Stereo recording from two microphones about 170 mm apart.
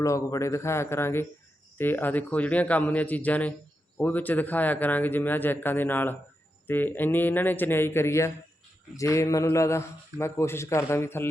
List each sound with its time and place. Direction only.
0.0 s speech: 20° left (ahead or behind)